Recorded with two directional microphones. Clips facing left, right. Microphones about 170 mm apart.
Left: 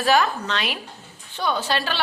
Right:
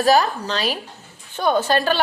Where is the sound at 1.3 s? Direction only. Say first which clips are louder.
Right 6 dB; 50° right (ahead or behind).